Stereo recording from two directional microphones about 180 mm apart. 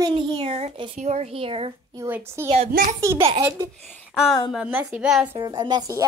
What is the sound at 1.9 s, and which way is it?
A woman's voice, 15° right (ahead or behind).